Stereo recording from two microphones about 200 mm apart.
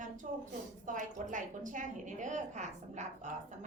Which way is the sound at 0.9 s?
40° right (ahead or behind).